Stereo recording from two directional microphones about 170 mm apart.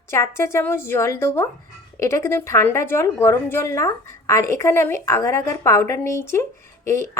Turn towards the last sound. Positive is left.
turn(degrees=15)  # may be behind; listen again after turning